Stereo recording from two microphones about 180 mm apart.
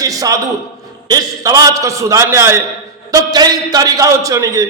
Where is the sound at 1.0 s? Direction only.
20° right (ahead or behind).